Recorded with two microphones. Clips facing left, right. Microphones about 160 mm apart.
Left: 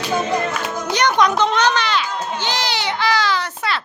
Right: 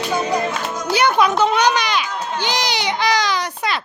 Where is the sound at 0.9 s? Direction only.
5° right (ahead or behind).